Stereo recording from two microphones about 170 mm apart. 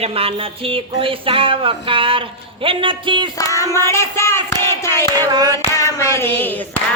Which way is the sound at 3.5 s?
15° left (ahead or behind).